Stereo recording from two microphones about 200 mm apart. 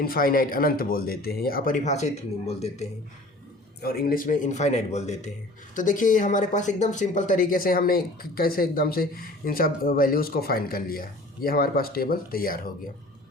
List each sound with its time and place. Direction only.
0.0 s speech: 45° left (ahead or behind)
3.8 s a man's voice: 50° left (ahead or behind)